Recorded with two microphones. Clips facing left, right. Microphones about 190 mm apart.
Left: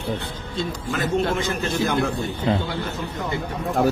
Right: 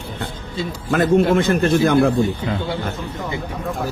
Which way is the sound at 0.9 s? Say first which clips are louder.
Right 8 dB; 55° right (ahead or behind).